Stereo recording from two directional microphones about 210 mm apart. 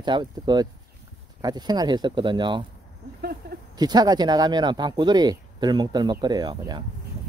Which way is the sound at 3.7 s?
20° right (ahead or behind).